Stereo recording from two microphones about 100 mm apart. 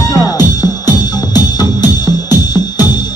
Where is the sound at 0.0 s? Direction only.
35° left (ahead or behind).